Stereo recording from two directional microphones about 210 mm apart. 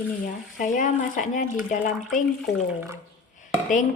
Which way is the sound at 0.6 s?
35° left (ahead or behind).